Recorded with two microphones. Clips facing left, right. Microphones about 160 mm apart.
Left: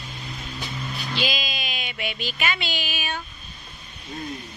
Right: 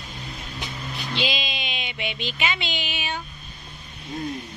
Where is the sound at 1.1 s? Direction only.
25° right (ahead or behind).